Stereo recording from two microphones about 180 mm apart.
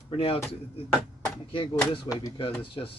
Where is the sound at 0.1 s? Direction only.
30° left (ahead or behind).